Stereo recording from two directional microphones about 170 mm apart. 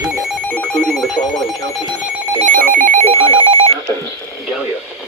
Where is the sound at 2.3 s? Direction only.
50° right (ahead or behind); by 3.8 s 35° right (ahead or behind).